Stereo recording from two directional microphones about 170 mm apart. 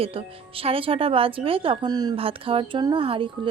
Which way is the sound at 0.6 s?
30° right (ahead or behind).